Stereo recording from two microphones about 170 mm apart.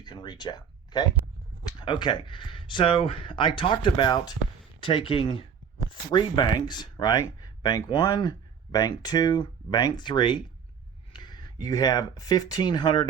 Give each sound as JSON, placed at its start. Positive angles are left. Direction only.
{"t": 0.0, "sound": "speech", "side_deg": 25}